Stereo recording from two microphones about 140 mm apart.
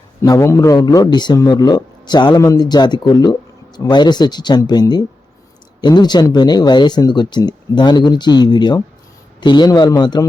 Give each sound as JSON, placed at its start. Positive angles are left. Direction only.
{"t": 0.2, "sound": "a man's voice", "side_deg": 20}